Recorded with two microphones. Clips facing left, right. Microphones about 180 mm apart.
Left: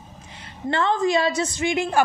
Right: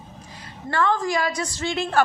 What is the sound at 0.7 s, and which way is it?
A woman's voice, 20° left (ahead or behind).